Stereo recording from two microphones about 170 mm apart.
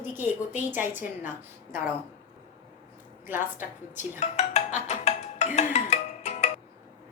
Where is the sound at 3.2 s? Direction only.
10° right (ahead or behind).